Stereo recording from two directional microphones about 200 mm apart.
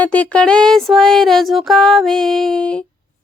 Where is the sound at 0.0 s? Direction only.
5° left (ahead or behind).